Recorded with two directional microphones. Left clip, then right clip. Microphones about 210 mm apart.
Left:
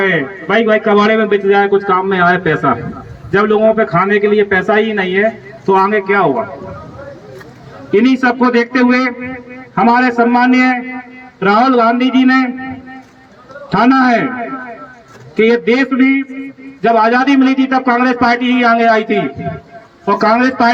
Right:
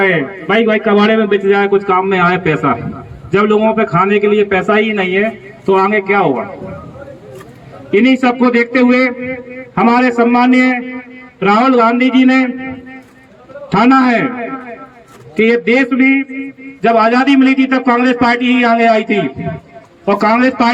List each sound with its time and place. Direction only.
0.0 s a man's voice: 50° right (ahead or behind)
7.9 s a man's voice: 50° right (ahead or behind)
13.7 s a man's voice: 50° right (ahead or behind)